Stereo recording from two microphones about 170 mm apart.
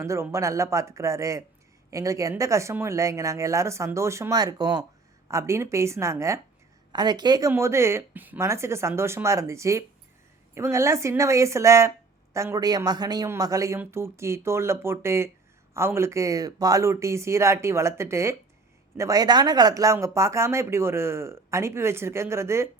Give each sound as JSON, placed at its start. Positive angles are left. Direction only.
{"t": 0.0, "sound": "speech", "side_deg": -15}